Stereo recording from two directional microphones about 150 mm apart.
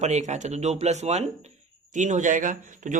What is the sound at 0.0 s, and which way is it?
A man's voice, 50° right (ahead or behind).